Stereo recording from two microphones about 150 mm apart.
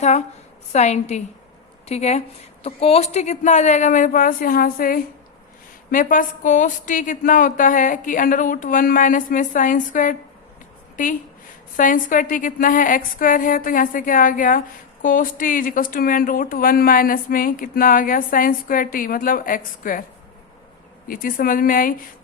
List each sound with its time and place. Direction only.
0.0 s a woman's voice: 50° left (ahead or behind); by 20.1 s 65° left (ahead or behind)
21.1 s speech: 70° left (ahead or behind)